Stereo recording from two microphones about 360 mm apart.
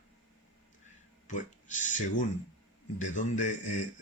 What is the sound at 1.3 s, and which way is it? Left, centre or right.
Speech, left.